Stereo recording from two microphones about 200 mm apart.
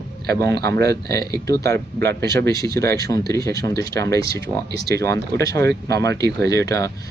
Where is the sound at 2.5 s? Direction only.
15° left (ahead or behind).